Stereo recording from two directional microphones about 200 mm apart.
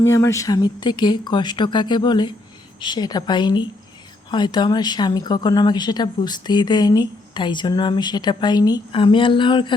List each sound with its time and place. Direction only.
0.0 s speech: 15° left (ahead or behind)